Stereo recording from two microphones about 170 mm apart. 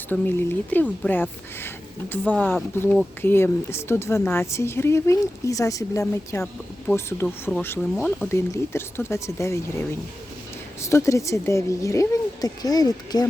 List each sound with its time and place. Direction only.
0.1 s a woman's voice: 10° left (ahead or behind)
7.5 s a woman's voice: 10° left (ahead or behind)
10.8 s a woman's voice: 15° left (ahead or behind)